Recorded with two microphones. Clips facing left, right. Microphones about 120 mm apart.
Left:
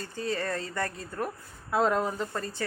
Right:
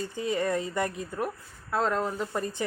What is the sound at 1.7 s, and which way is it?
Speech, 5° left (ahead or behind).